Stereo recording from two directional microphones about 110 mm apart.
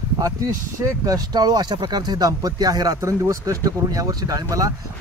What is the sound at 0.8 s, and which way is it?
Speech, 30° right (ahead or behind).